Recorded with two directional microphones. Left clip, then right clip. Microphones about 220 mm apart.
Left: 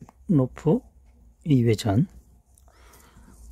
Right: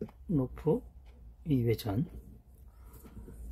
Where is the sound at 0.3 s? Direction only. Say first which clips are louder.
Left 8 dB; 50° left (ahead or behind).